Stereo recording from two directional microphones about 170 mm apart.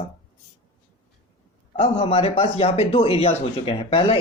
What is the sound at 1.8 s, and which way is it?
Speech, 35° left (ahead or behind).